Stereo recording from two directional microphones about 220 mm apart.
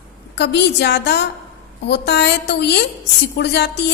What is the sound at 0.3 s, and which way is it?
A woman's voice, 50° left (ahead or behind).